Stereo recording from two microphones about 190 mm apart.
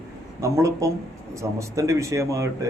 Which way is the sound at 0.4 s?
15° right (ahead or behind).